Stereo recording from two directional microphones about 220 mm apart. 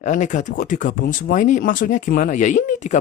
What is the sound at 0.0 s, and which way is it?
Speech, 35° left (ahead or behind).